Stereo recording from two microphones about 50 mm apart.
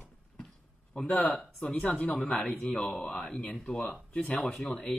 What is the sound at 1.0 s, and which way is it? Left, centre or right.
Speech, left.